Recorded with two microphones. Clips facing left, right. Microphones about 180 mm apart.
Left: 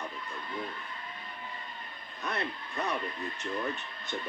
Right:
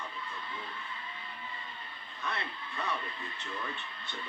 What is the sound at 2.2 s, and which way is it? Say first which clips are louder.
Speech: left 4 dB; 45° left (ahead or behind).